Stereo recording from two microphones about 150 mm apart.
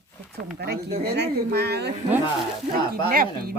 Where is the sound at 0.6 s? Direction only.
90° right.